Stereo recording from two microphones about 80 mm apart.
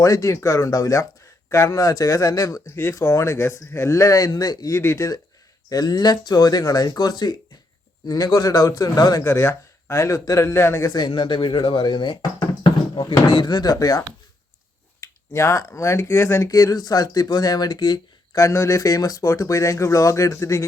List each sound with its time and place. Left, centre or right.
0.0 s speech: left
4.8 s speech: left
5.6 s speech: left
9.2 s speech: left
10.9 s speech: left
15.0 s speech: left
16.5 s speech: left
18.3 s speech: left